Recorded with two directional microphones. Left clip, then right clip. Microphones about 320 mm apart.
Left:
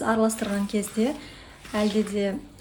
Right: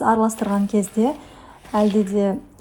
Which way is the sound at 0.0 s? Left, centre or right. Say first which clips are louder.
Right 5 dB; centre.